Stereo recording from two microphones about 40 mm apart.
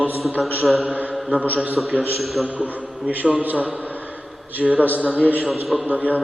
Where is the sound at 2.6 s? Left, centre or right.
Right.